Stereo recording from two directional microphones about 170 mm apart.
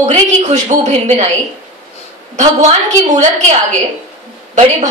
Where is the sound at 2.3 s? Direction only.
45° right (ahead or behind).